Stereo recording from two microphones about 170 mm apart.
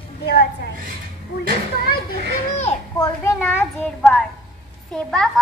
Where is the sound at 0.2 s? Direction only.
75° left (ahead or behind).